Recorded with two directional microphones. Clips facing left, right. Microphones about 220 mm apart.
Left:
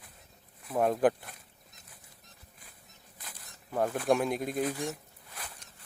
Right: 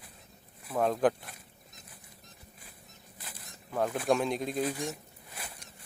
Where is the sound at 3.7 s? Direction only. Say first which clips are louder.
Left 1 dB; 10° left (ahead or behind).